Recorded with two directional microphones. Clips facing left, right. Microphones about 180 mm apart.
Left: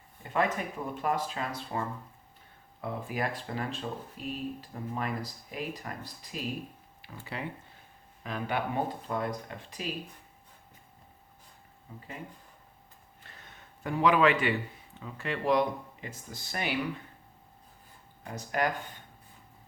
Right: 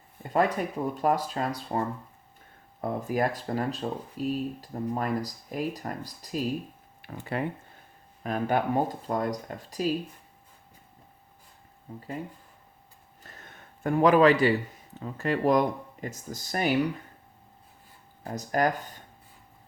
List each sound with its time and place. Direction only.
0.2 s speech: 35° right (ahead or behind)
7.0 s a sound: 55° right (ahead or behind)
8.2 s speech: 45° right (ahead or behind)
13.2 s speech: 45° right (ahead or behind)
18.2 s speech: 40° right (ahead or behind)